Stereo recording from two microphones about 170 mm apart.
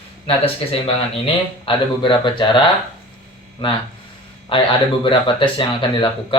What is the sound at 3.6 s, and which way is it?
Speech, 30° left (ahead or behind).